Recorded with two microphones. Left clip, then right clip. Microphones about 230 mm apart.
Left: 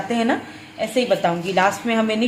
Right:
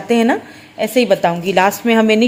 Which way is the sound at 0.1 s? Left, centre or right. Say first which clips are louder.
Right 8 dB; right.